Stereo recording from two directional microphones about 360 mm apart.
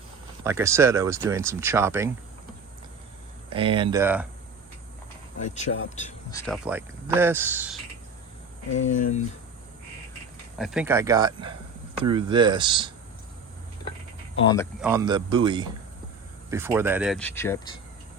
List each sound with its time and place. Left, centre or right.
0.4 s speech: centre
3.5 s speech: centre
5.4 s speech: centre
6.4 s speech: centre
10.6 s speech: centre
14.3 s speech: centre
14.8 s speech: centre